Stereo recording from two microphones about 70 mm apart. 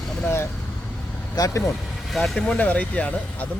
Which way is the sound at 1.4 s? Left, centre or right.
Left.